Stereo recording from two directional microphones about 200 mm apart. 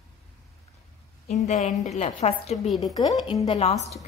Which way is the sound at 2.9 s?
20° left (ahead or behind).